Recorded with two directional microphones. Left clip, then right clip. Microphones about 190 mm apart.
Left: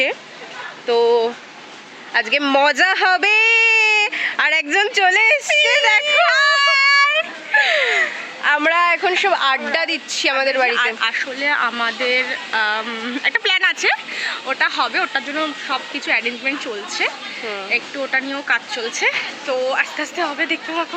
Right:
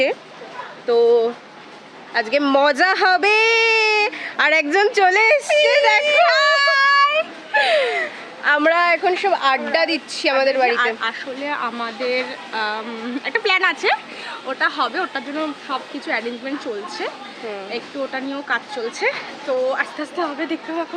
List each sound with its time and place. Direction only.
0.9 s speech: 15° right (ahead or behind)
2.1 s speech: 5° right (ahead or behind)
5.6 s speech: 5° left (ahead or behind)
6.1 s vehicle: 10° right (ahead or behind)
7.5 s a sound: 5° left (ahead or behind)
8.4 s speech: 5° right (ahead or behind)
10.8 s speech: 15° right (ahead or behind)